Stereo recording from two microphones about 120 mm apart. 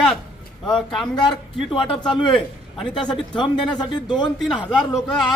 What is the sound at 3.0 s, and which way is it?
A man's voice, 40° left (ahead or behind).